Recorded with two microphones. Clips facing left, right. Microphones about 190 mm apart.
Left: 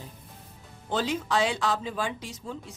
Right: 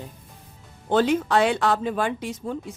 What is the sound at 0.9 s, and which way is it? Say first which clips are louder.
A woman's voice: right 8 dB; 55° right (ahead or behind).